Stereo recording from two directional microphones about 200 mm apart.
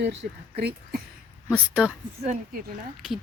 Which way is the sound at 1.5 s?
5° right (ahead or behind).